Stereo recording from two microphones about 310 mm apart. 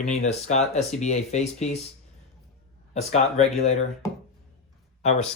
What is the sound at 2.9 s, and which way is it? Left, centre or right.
Speech, left.